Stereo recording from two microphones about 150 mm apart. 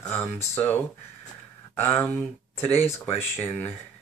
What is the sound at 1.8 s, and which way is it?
Speech, 10° left (ahead or behind).